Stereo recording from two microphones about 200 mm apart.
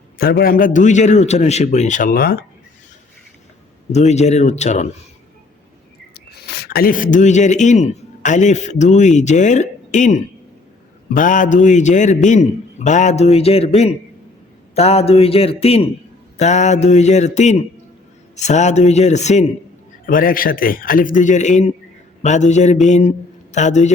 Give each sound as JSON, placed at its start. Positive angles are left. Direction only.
{"t": 0.2, "sound": "a man's voice", "side_deg": 50}
{"t": 3.9, "sound": "a man's voice", "side_deg": 35}
{"t": 6.3, "sound": "a man's voice", "side_deg": 50}